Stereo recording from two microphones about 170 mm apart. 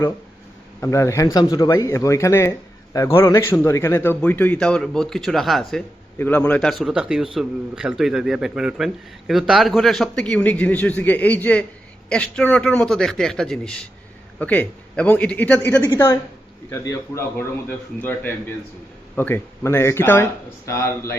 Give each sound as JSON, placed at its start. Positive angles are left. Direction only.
{"t": 0.8, "sound": "speech", "side_deg": 15}
{"t": 6.1, "sound": "a man's voice", "side_deg": 10}